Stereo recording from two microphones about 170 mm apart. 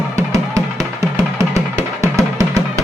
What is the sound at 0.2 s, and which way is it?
Music, 20° right (ahead or behind).